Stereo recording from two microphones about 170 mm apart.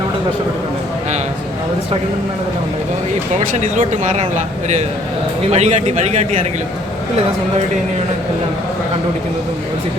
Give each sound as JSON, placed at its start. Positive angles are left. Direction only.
{"t": 3.3, "sound": "a man's voice", "side_deg": -45}